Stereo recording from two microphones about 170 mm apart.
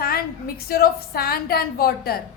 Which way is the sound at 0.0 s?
60° left (ahead or behind).